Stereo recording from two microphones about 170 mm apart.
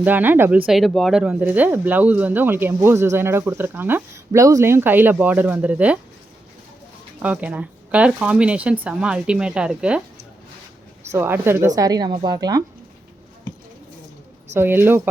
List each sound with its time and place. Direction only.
0.0 s speech: 10° right (ahead or behind)
7.2 s speech: 10° right (ahead or behind)
11.1 s a woman's voice: 15° right (ahead or behind)
14.5 s speech: 15° right (ahead or behind)